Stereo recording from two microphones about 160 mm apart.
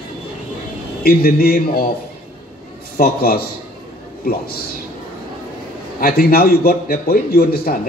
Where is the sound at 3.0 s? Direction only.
70° left (ahead or behind).